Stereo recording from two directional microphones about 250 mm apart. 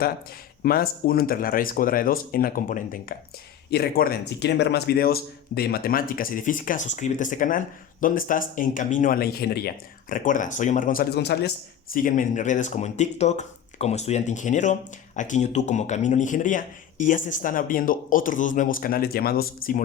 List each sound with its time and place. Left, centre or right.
0.6 s speech: left